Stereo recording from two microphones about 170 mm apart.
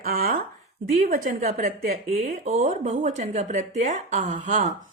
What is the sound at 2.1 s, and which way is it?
A woman's voice, 40° right (ahead or behind).